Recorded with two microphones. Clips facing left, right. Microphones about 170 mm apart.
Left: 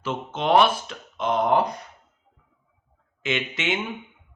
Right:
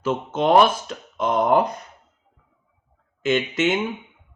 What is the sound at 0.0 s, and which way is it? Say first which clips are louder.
Speech: right 6 dB; 45° right (ahead or behind).